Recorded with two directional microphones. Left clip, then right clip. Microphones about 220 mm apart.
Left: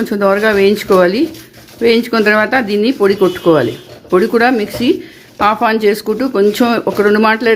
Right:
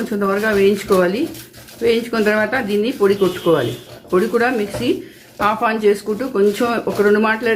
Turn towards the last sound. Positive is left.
turn(degrees=40)  # may be behind; listen again after turning